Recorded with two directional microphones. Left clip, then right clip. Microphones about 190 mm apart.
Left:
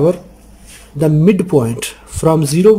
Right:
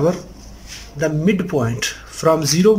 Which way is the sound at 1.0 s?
25° left (ahead or behind).